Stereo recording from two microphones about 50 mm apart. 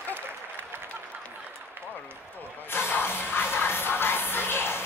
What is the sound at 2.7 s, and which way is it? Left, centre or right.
Music, left.